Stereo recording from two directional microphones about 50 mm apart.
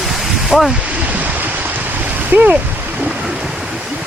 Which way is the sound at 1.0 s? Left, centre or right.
Right.